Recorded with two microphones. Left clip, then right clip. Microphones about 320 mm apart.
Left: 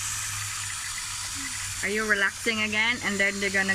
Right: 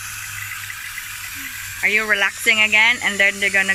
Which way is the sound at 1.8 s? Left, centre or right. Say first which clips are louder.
Right 11 dB; right.